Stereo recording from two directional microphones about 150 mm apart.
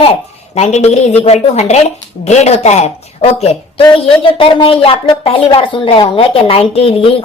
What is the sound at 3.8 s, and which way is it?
A woman's voice, 35° left (ahead or behind).